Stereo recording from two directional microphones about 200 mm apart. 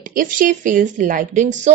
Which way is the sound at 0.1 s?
45° right (ahead or behind).